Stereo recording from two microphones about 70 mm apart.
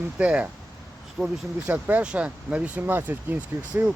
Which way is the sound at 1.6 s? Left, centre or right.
Right.